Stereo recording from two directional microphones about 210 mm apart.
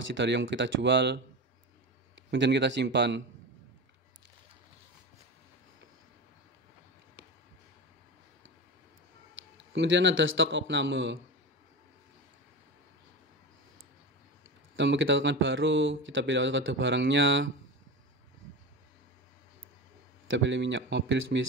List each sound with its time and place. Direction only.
0.1 s speech: 60° right (ahead or behind)
9.7 s speech: 60° right (ahead or behind)
14.8 s speech: 60° right (ahead or behind)
20.2 s speech: 60° right (ahead or behind)